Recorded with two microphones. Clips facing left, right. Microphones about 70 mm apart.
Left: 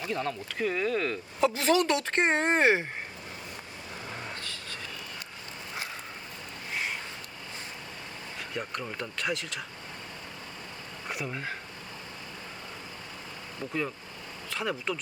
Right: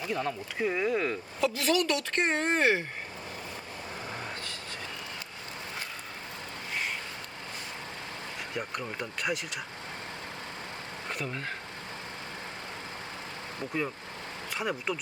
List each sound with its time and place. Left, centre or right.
0.1 s speech: centre
1.4 s speech: left
8.5 s speech: centre
11.1 s speech: centre
14.5 s speech: centre